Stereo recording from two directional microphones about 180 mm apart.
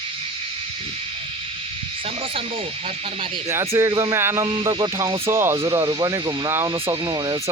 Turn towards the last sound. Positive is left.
turn(degrees=-20)  # may be behind; listen again after turning